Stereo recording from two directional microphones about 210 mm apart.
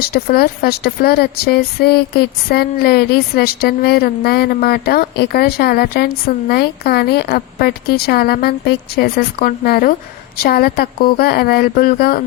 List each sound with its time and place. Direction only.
0.1 s speech: 45° left (ahead or behind)